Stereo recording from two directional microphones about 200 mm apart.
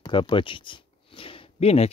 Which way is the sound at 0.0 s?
25° left (ahead or behind).